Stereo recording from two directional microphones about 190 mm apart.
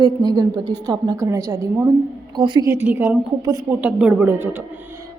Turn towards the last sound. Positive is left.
turn(degrees=-10)  # may be behind; listen again after turning